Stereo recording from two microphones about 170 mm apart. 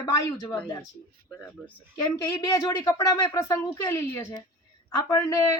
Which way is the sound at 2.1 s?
20° left (ahead or behind).